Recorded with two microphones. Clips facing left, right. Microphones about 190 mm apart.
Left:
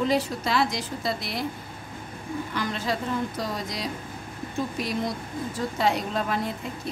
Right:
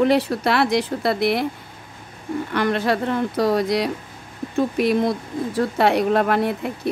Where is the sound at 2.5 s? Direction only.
65° right (ahead or behind).